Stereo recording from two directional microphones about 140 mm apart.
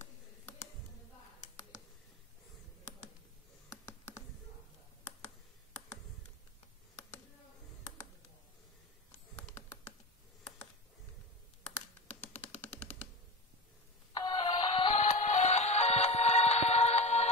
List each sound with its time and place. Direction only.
12.5 s typewriter: 10° left (ahead or behind)
14.2 s music: 40° left (ahead or behind)
15.0 s music: 55° left (ahead or behind)